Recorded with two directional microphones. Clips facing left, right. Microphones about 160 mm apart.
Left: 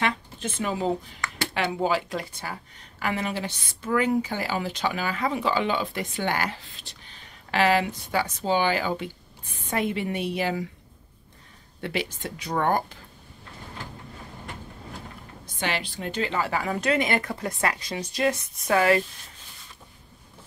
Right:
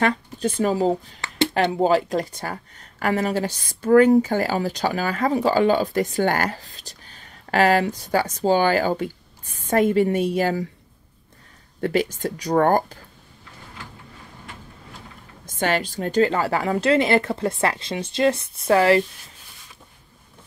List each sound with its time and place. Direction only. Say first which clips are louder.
0.0 s speech: right 6 dB; 40° right (ahead or behind)
11.8 s speech: right 8 dB; 45° right (ahead or behind)
15.4 s speech: right 7 dB; 45° right (ahead or behind); by 19.0 s 30° right (ahead or behind)